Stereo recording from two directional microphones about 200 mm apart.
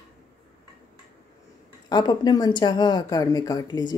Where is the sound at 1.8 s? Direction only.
20° left (ahead or behind).